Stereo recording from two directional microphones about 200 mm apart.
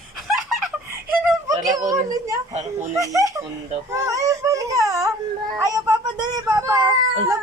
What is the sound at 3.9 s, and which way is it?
Baby cry, 15° right (ahead or behind).